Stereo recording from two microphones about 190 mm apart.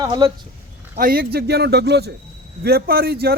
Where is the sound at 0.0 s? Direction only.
20° right (ahead or behind).